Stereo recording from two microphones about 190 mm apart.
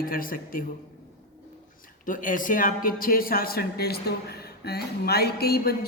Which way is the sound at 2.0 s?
45° left (ahead or behind).